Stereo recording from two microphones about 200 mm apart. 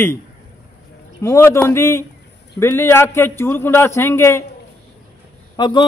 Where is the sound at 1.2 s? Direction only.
15° left (ahead or behind).